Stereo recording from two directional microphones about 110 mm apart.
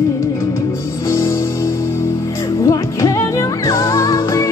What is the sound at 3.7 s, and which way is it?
Music, 30° left (ahead or behind).